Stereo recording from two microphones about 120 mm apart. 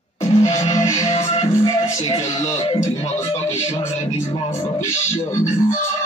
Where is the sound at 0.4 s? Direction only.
25° left (ahead or behind).